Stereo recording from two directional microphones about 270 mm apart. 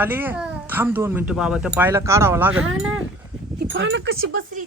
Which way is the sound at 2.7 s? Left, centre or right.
Right.